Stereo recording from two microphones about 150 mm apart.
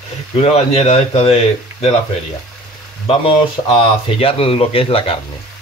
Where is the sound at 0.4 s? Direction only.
45° left (ahead or behind).